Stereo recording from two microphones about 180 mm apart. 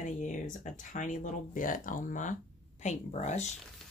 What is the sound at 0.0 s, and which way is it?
Speech, 45° left (ahead or behind).